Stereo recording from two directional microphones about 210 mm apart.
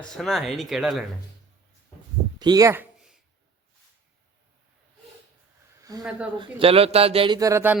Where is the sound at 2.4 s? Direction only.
15° right (ahead or behind).